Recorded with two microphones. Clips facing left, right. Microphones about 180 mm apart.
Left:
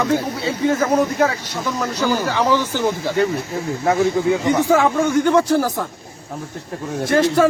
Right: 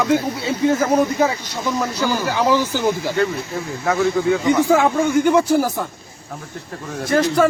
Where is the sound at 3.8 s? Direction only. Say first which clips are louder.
Left 2 dB; 25° left (ahead or behind).